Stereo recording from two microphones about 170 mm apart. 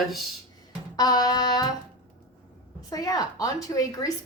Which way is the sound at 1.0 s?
25° left (ahead or behind).